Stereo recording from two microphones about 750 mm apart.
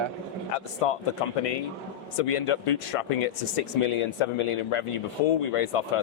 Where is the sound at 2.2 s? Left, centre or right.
Left.